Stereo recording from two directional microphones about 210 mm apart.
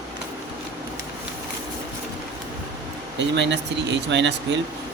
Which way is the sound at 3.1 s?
55° right (ahead or behind).